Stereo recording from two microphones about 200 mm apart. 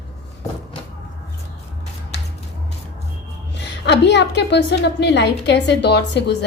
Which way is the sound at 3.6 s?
60° left (ahead or behind).